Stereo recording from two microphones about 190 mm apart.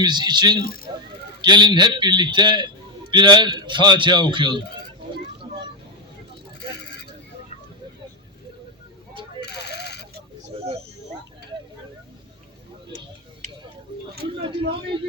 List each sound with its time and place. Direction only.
0.0 s a man's voice: 25° right (ahead or behind)
0.6 s speech: 50° left (ahead or behind)
1.4 s a man's voice: 25° right (ahead or behind)
5.4 s vehicle: 25° right (ahead or behind)
6.6 s vehicle: 60° left (ahead or behind)
9.4 s a sound: 60° left (ahead or behind)
14.4 s a sound: 25° right (ahead or behind)